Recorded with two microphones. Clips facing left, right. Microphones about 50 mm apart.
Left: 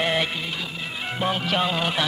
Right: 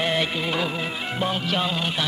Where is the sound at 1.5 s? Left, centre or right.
Left.